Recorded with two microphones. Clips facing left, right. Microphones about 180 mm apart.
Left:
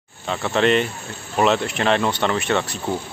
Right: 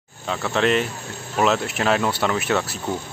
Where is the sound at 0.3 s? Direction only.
Centre (ahead or behind).